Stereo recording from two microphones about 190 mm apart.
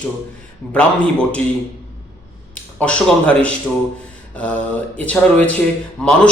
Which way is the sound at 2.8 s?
5° left (ahead or behind).